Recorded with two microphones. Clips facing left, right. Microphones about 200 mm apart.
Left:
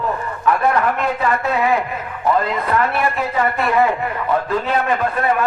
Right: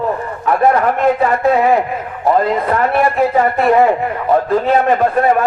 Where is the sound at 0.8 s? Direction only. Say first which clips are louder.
Right 6 dB; 40° right (ahead or behind).